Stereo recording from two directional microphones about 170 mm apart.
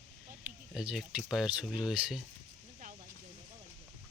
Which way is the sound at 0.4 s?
5° right (ahead or behind).